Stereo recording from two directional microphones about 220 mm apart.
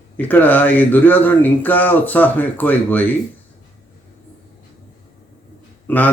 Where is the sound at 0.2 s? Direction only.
10° left (ahead or behind).